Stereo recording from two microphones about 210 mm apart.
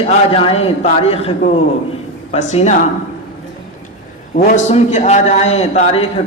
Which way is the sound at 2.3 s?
30° left (ahead or behind).